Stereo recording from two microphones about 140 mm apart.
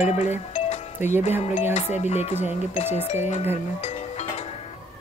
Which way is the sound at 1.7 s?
50° left (ahead or behind).